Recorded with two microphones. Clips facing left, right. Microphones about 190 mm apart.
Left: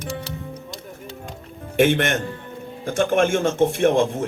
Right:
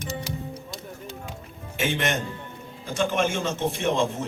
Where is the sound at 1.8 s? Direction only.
55° left (ahead or behind).